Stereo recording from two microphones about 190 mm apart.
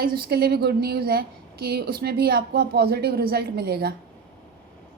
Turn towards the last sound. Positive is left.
turn(degrees=-55)  # may be behind; listen again after turning